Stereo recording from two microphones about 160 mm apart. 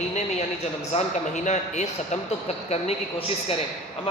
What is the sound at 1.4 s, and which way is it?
Speech, 45° left (ahead or behind).